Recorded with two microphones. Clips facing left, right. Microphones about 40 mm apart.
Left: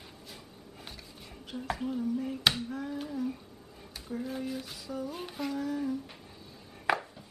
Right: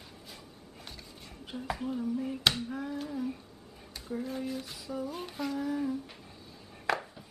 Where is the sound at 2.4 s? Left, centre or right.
Centre.